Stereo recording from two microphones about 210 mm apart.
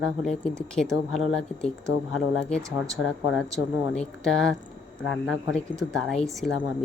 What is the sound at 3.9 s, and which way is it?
A woman's voice, 5° left (ahead or behind).